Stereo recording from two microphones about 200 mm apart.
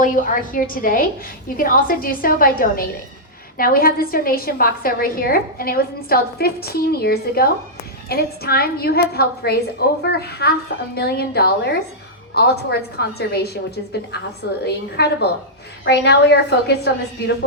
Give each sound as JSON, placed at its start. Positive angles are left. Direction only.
{"t": 0.0, "sound": "a woman's voice", "side_deg": 40}